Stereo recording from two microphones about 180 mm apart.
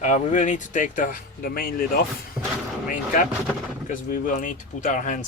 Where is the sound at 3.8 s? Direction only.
50° left (ahead or behind).